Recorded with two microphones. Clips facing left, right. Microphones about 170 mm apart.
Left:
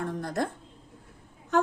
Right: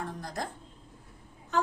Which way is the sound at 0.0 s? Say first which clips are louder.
Left 6 dB; 55° left (ahead or behind).